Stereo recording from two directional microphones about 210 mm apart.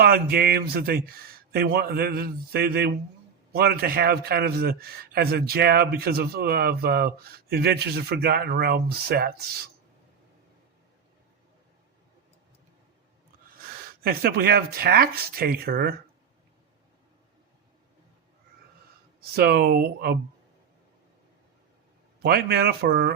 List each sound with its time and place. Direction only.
0.0 s a man's voice: 45° right (ahead or behind)
14.0 s a man's voice: 45° right (ahead or behind)
19.3 s a man's voice: 45° right (ahead or behind)
22.2 s a man's voice: 45° right (ahead or behind)